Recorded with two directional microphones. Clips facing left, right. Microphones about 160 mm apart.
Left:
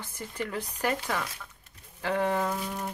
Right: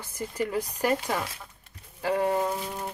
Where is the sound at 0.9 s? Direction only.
30° right (ahead or behind).